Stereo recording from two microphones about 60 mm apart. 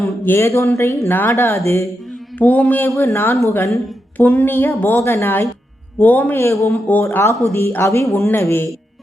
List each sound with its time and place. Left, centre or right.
0.0 s a sound: left
0.4 s a man's voice: left
2.4 s mantra: left
3.1 s a man's voice: left
4.2 s speech: left
4.9 s a man's voice: left
6.0 s mantra: left
6.3 s a man's voice: left
6.7 s mantra: left
7.4 s a man's voice: left